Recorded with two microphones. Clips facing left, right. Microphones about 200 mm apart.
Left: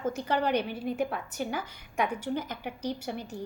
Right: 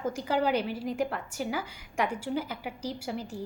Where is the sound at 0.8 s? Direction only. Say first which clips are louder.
Even; 90° right.